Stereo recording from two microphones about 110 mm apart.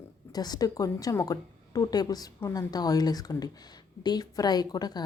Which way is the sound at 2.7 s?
35° left (ahead or behind).